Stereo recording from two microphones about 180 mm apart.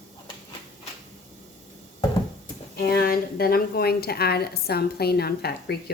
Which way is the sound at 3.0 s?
55° left (ahead or behind).